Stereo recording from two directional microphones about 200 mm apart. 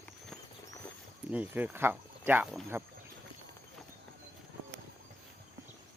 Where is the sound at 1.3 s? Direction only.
5° right (ahead or behind).